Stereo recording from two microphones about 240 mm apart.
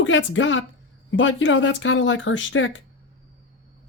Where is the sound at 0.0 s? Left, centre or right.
Left.